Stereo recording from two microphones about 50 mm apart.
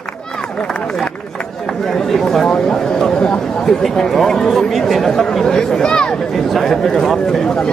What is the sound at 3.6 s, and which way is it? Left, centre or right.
Chatter, centre.